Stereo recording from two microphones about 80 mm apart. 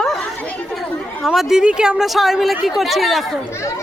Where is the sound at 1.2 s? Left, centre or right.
Centre.